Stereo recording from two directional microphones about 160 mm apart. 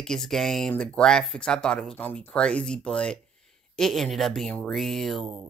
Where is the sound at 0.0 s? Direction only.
5° left (ahead or behind).